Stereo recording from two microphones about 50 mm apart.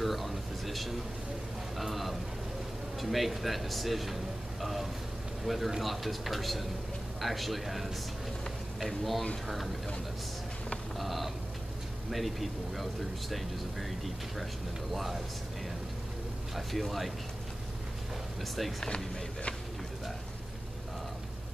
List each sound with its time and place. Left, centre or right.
0.0 s a sound: centre
1.8 s speech: centre
11.0 s a sound: centre
12.1 s speech: centre
16.5 s speech: centre
18.4 s speech: centre